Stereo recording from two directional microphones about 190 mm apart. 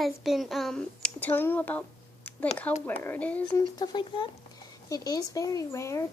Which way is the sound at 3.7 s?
20° left (ahead or behind).